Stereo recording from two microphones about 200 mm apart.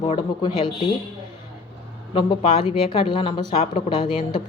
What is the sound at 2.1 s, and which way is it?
Speech, 25° left (ahead or behind).